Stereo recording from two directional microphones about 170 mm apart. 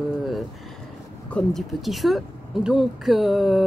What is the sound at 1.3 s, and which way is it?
A woman's voice, centre (ahead or behind).